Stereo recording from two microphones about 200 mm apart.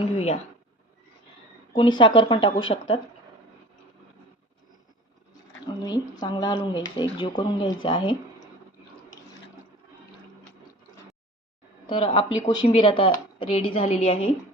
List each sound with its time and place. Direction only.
0.0 s speech: 30° left (ahead or behind)
1.7 s speech: 25° left (ahead or behind)
5.8 s speech: 20° left (ahead or behind)
11.9 s speech: 25° left (ahead or behind)